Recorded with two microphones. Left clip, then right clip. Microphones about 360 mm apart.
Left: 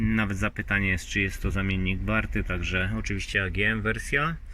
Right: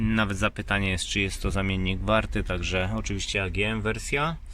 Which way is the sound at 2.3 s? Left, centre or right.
Right.